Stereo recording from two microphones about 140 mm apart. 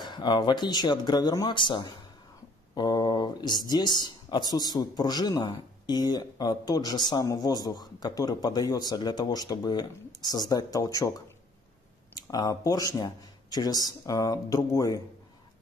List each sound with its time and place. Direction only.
0.0 s speech: 30° left (ahead or behind)
12.3 s speech: 25° left (ahead or behind)